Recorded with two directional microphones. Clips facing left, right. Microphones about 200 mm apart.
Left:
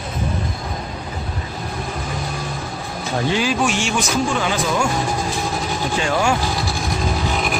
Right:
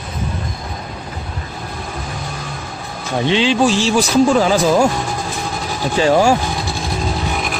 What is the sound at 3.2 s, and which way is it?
A man's voice, 25° right (ahead or behind).